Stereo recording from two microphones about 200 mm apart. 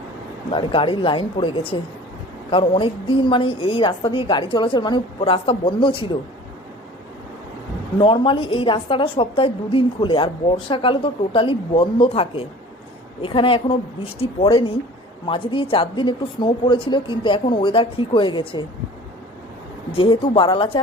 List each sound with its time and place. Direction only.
0.5 s a woman's voice: 25° left (ahead or behind)
8.0 s a woman's voice: 25° left (ahead or behind)
20.0 s a woman's voice: 25° left (ahead or behind)